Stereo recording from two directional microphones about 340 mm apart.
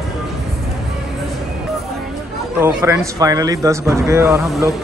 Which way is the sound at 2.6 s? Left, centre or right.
Centre.